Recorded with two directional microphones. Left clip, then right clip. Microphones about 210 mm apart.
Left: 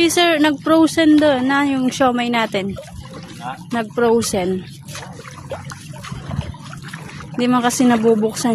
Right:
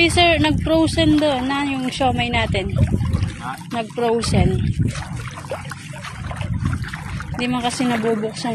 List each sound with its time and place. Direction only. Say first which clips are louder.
0.0 s speech: left 1 dB; 30° left (ahead or behind)
3.7 s speech: left 4 dB; 35° left (ahead or behind)
7.3 s speech: left 5 dB; 35° left (ahead or behind)